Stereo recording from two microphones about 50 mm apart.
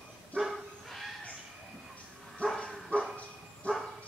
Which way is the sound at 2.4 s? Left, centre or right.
Left.